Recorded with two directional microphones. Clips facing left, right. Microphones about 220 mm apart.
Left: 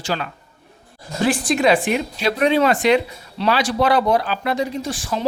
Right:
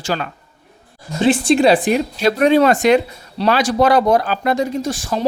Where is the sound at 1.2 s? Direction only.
25° right (ahead or behind).